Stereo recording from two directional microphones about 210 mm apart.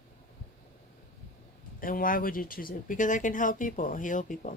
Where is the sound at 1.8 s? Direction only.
40° left (ahead or behind).